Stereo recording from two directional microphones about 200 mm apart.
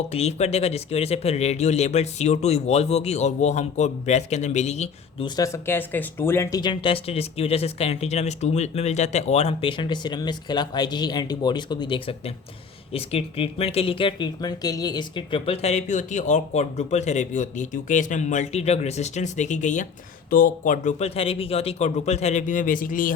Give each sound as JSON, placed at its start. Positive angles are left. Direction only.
{"t": 0.1, "sound": "speech", "side_deg": 30}
{"t": 5.4, "sound": "speech", "side_deg": 10}